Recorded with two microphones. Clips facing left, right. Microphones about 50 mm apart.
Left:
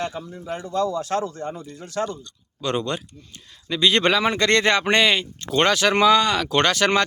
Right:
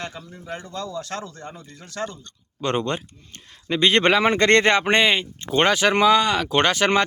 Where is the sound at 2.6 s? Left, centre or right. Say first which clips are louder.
Right 1 dB; right.